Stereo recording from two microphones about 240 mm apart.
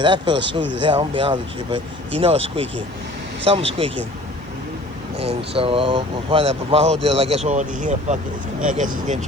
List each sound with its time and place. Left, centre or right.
0.0 s speech: centre
5.1 s speech: right